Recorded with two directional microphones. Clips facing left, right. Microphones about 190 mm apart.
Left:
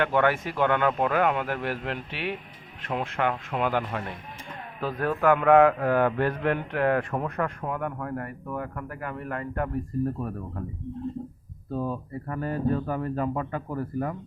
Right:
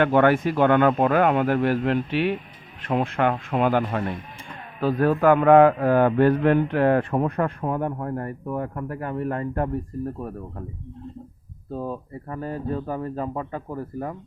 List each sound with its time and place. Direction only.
0.0 s a man's voice: 40° right (ahead or behind); by 10.6 s 25° right (ahead or behind)
11.7 s speech: 25° right (ahead or behind)